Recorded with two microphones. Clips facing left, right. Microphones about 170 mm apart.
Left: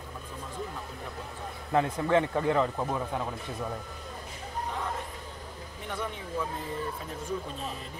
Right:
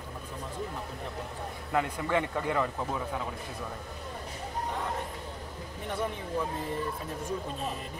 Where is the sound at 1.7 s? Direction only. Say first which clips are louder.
Left 4 dB; 20° left (ahead or behind).